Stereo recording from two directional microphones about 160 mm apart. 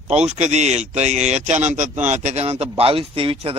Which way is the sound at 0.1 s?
45° right (ahead or behind).